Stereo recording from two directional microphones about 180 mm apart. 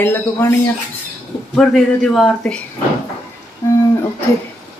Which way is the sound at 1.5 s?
Centre (ahead or behind).